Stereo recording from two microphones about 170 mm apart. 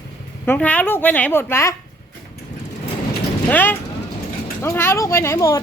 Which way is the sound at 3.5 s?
10° left (ahead or behind).